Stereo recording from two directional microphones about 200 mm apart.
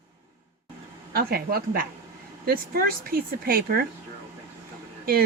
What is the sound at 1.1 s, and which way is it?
A woman's voice, 50° right (ahead or behind).